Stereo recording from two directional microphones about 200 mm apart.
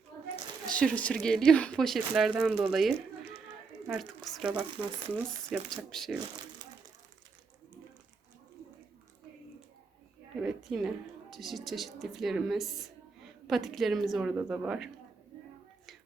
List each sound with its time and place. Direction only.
0.7 s a woman's voice: 5° left (ahead or behind)
6.6 s crumpling: 20° right (ahead or behind)
10.4 s a woman's voice: centre (ahead or behind)